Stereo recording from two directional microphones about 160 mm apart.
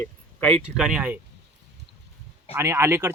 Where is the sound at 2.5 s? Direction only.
15° right (ahead or behind).